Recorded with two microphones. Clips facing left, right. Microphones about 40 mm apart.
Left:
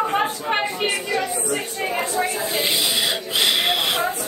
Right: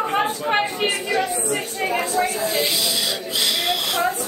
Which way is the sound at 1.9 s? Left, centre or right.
Centre.